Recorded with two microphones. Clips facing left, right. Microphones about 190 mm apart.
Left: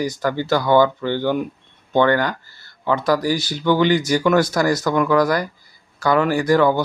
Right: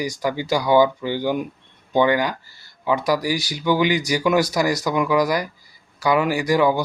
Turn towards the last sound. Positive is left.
turn(degrees=-10)  # may be behind; listen again after turning